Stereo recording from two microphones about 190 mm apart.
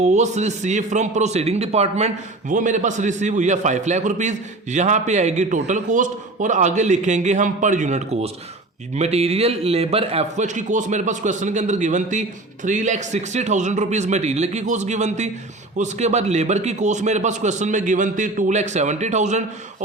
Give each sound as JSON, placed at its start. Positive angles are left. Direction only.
{"t": 0.0, "sound": "a man's voice", "side_deg": -35}